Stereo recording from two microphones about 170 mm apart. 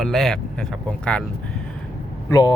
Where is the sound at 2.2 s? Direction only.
20° left (ahead or behind).